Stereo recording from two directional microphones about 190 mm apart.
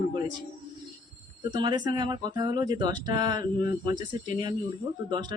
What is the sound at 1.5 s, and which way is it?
Speech, 25° right (ahead or behind).